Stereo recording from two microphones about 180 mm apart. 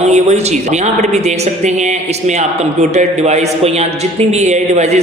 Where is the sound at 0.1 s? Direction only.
40° right (ahead or behind).